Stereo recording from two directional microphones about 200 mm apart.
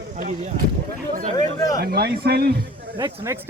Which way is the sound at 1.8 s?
50° right (ahead or behind).